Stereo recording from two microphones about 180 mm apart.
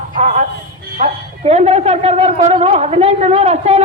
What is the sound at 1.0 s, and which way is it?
Speech, 40° right (ahead or behind).